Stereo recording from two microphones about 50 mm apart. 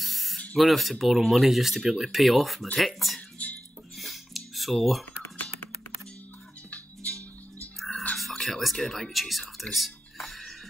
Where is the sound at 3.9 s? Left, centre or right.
Centre.